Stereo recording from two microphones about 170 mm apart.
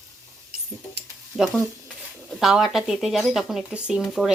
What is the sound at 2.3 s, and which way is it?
Speech, centre (ahead or behind).